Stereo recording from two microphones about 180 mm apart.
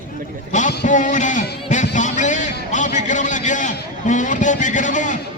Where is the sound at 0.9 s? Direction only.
45° left (ahead or behind).